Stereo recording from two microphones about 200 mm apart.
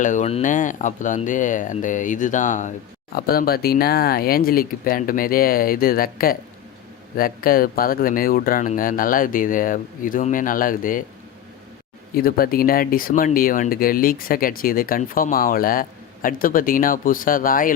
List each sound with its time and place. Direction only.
0.0 s speech: 35° left (ahead or behind)
3.2 s speech: 50° left (ahead or behind)
12.1 s speech: 45° left (ahead or behind)